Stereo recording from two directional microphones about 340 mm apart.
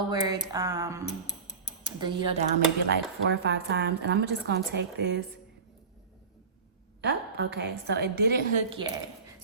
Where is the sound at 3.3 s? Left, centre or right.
Right.